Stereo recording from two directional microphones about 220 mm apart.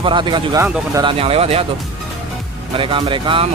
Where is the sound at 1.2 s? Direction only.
25° right (ahead or behind).